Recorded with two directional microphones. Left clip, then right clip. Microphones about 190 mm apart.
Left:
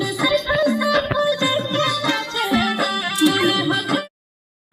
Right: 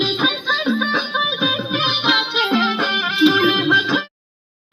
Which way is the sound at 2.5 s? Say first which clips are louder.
Right 2 dB; 20° left (ahead or behind).